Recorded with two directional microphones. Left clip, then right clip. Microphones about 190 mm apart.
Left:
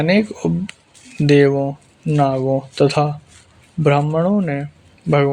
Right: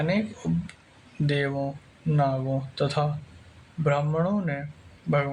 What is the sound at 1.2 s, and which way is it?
Speech, 40° left (ahead or behind).